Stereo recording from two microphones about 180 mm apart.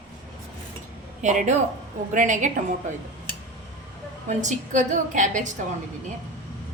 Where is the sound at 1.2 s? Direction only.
40° right (ahead or behind).